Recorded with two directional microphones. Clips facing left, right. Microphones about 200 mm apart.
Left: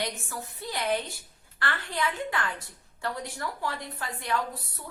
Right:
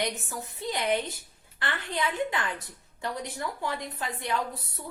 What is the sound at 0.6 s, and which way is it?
A woman's voice, 20° right (ahead or behind).